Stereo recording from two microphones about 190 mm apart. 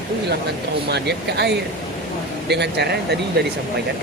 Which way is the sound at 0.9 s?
60° right (ahead or behind).